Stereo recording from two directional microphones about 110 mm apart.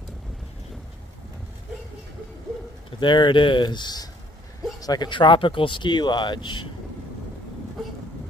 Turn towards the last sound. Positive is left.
turn(degrees=45)  # may be behind; listen again after turning